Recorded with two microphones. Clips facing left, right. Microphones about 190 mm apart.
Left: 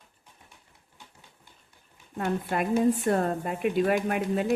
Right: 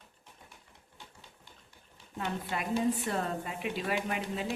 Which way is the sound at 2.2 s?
50° left (ahead or behind).